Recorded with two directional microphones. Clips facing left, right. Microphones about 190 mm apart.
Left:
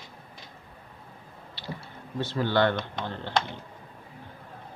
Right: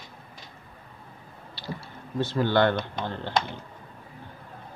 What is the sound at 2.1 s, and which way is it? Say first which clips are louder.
Speech: right 2 dB; 50° right (ahead or behind).